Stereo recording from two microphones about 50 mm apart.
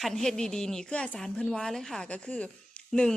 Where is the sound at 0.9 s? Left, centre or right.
Left.